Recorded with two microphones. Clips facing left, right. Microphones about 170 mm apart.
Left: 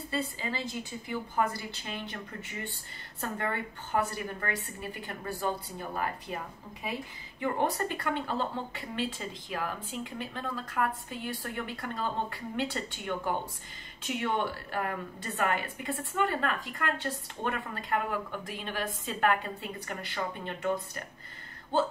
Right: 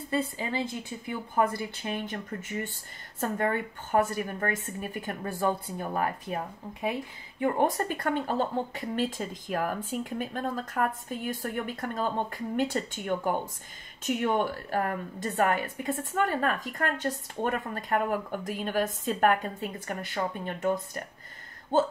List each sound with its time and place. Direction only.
0.1 s a woman's voice: 50° right (ahead or behind)